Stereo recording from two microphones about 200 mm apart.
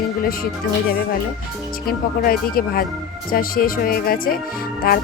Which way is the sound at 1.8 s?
45° left (ahead or behind).